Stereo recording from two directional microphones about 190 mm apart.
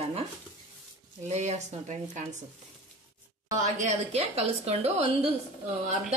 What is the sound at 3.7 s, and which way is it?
A woman's voice, 35° right (ahead or behind).